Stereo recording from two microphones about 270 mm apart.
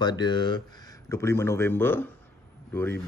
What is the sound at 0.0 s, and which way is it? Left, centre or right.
Speech, centre.